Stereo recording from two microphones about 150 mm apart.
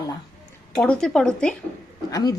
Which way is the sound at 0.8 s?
5° left (ahead or behind).